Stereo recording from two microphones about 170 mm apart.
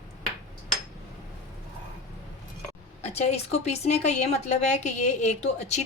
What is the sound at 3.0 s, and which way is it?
A woman's voice, 40° left (ahead or behind).